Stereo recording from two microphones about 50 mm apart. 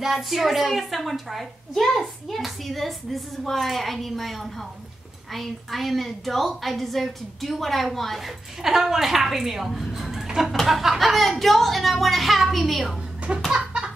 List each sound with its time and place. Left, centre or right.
0.0 s a woman's voice: centre
8.6 s a woman's voice: centre
13.5 s chicken: centre